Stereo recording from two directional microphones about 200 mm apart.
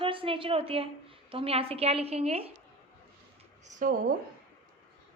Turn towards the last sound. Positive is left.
turn(degrees=-40)  # may be behind; listen again after turning